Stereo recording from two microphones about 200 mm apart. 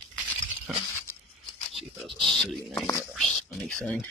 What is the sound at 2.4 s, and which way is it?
Speech, 15° left (ahead or behind).